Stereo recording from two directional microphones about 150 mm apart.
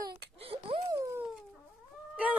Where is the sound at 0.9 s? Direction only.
20° right (ahead or behind).